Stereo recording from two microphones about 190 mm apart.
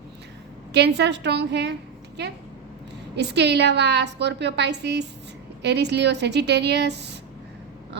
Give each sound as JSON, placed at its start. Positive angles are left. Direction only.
{"t": 0.7, "sound": "a woman's voice", "side_deg": -60}
{"t": 3.2, "sound": "a woman's voice", "side_deg": -65}